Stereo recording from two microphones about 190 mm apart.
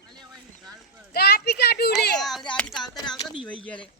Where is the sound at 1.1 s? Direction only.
55° left (ahead or behind).